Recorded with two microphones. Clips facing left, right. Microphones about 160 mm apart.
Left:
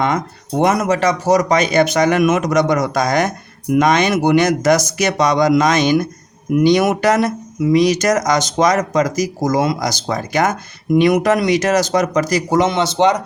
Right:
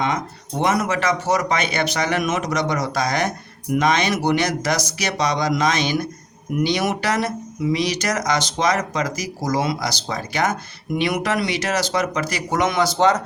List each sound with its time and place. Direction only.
0.6 s speech: 45° left (ahead or behind); by 13.2 s 20° left (ahead or behind)